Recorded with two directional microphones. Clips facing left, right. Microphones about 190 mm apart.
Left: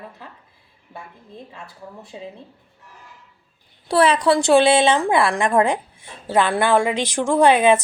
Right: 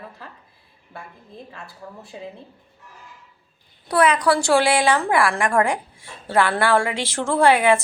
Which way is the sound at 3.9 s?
30° left (ahead or behind).